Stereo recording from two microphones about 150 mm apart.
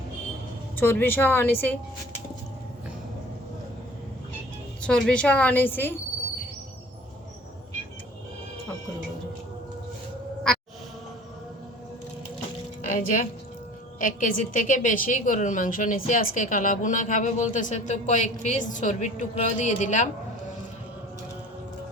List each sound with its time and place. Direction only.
0.8 s a woman's voice: 15° left (ahead or behind)
4.8 s a woman's voice: 5° left (ahead or behind)
12.8 s a sound: 60° left (ahead or behind)
14.0 s a woman's voice: 60° left (ahead or behind)